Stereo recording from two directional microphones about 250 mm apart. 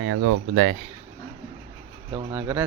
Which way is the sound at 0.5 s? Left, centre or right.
Right.